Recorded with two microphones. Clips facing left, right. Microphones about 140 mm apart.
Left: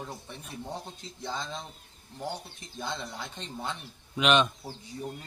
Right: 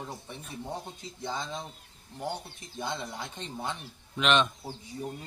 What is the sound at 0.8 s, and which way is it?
Speech, 15° right (ahead or behind).